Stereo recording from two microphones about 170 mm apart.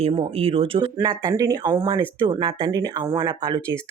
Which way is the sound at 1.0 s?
25° right (ahead or behind).